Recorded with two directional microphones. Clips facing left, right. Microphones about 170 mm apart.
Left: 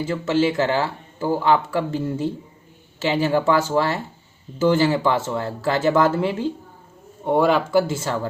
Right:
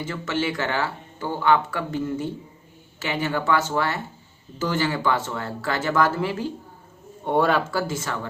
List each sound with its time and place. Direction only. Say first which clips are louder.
0.0 s speech: left 6 dB; 30° left (ahead or behind)
7.3 s speech: left 3 dB; 10° left (ahead or behind); by 8.3 s 30° left (ahead or behind)